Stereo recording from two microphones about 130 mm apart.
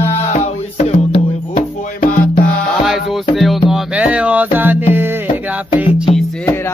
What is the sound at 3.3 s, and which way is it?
Music, centre (ahead or behind).